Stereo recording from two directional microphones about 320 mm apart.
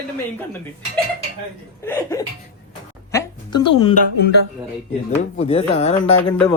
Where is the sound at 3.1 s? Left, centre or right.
Centre.